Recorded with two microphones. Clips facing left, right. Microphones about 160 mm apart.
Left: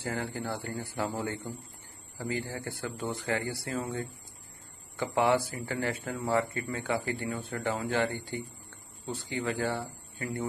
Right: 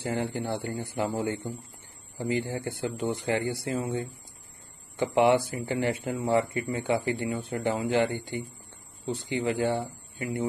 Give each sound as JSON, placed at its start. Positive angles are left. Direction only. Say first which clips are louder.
{"t": 0.0, "sound": "speech", "louder": "right 4 dB", "side_deg": -20}